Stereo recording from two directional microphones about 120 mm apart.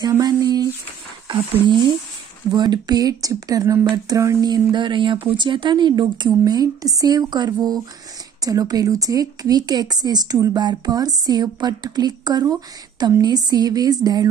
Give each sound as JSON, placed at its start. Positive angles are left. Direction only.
{"t": 0.2, "sound": "speech", "side_deg": -35}